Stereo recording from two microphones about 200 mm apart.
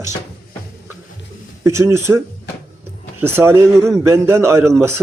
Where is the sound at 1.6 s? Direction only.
15° right (ahead or behind).